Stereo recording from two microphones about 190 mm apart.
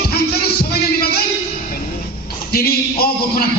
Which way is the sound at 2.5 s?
55° left (ahead or behind).